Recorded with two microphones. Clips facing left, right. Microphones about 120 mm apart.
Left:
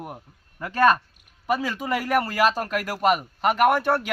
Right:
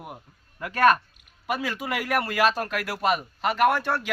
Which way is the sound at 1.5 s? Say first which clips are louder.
Left 4 dB; 40° left (ahead or behind).